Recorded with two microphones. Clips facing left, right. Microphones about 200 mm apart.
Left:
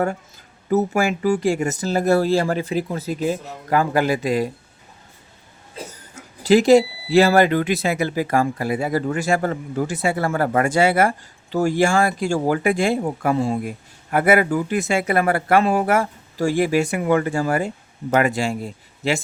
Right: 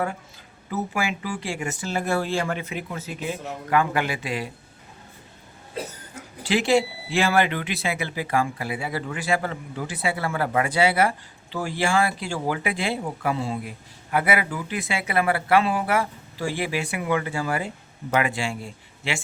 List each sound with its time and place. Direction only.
0.7 s speech: 45° left (ahead or behind)
6.4 s speech: 40° left (ahead or behind)